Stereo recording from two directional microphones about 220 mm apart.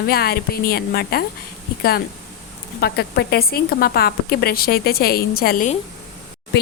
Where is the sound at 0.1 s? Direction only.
45° left (ahead or behind).